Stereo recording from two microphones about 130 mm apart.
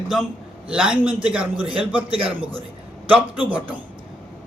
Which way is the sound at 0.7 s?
5° right (ahead or behind).